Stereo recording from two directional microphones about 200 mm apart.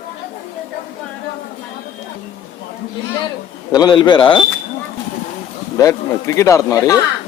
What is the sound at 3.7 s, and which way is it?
Speech, 20° left (ahead or behind).